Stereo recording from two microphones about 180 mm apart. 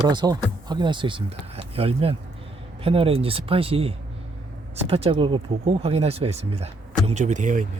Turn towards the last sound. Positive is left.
turn(degrees=-45)  # may be behind; listen again after turning